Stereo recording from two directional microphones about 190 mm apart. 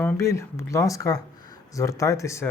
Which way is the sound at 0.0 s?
10° left (ahead or behind).